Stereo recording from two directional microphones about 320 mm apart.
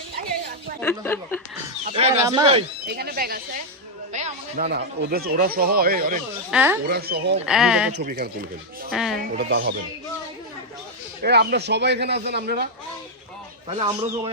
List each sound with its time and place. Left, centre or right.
0.8 s speech: centre
1.8 s speech: centre
2.8 s speech: right
6.5 s speech: centre
6.8 s speech: right
7.4 s speech: centre
7.9 s speech: right
8.9 s speech: centre
9.3 s speech: right
11.2 s a man's voice: right
13.7 s speech: centre